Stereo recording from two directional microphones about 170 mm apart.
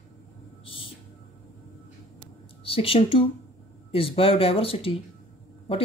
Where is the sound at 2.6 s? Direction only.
35° left (ahead or behind).